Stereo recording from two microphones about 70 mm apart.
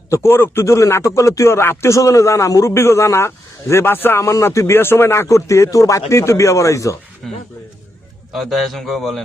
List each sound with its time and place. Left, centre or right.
0.1 s a man's voice: left
0.6 s speech: left
2.7 s a man's voice: left
7.2 s a man's voice: centre